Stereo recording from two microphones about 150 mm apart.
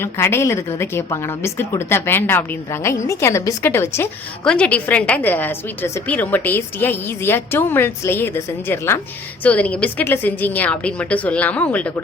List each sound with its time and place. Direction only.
0.0 s a woman's voice: 15° left (ahead or behind)